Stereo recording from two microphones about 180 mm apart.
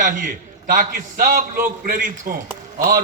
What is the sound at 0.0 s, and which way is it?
A man's voice, 45° right (ahead or behind).